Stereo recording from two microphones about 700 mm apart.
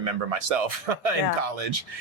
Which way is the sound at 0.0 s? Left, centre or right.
Right.